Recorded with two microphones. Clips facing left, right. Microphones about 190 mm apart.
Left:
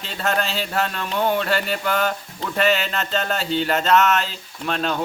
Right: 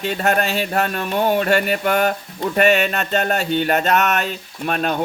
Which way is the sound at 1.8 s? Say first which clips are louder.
Right 4 dB; 65° right (ahead or behind).